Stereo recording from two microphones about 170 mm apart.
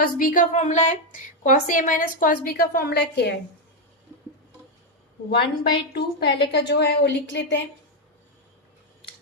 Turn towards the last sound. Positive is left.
turn(degrees=90)